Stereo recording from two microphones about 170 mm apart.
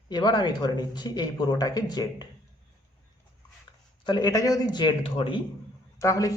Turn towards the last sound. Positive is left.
turn(degrees=20)  # may be behind; listen again after turning